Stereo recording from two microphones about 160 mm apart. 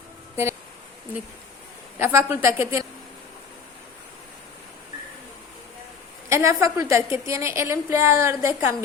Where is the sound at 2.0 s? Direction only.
15° right (ahead or behind).